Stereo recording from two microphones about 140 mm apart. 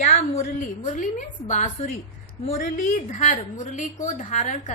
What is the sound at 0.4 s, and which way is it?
A woman's voice, 65° left (ahead or behind).